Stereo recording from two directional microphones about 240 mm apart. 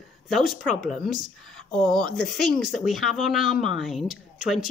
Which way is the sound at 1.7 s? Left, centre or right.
Centre.